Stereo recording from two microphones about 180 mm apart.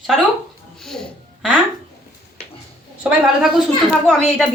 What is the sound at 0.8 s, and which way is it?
Music, 5° left (ahead or behind).